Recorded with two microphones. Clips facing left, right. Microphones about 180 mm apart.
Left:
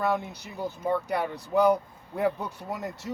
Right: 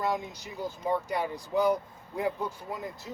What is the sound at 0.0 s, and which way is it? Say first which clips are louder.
Speech: left 3 dB; 60° left (ahead or behind).